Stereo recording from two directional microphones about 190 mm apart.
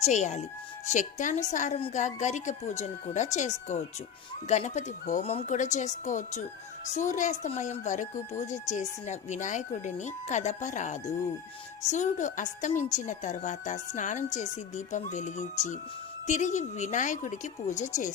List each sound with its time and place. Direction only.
0.0 s speech: 40° left (ahead or behind)